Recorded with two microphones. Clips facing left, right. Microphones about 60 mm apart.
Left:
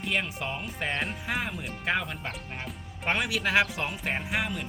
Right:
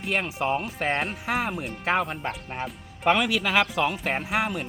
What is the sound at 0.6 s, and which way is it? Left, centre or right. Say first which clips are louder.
Speech: right 5 dB; right.